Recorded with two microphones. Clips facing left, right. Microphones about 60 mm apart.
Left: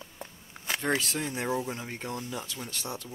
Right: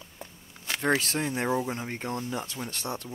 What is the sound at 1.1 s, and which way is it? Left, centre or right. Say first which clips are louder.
Speech: right 3 dB; right.